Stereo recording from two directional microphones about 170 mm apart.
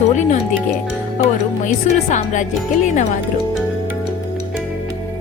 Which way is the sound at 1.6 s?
45° left (ahead or behind).